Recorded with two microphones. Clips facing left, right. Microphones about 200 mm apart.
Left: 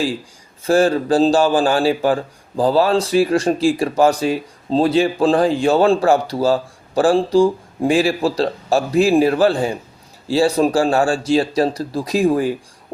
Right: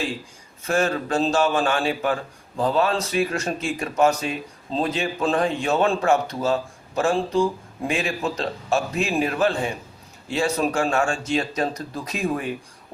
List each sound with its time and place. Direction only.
0.6 s speech: 35° left (ahead or behind)